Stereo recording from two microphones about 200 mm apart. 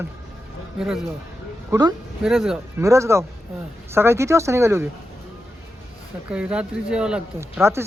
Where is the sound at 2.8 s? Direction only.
15° right (ahead or behind).